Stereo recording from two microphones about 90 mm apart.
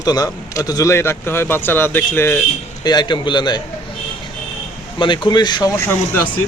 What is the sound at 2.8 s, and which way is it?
Speech, 55° left (ahead or behind).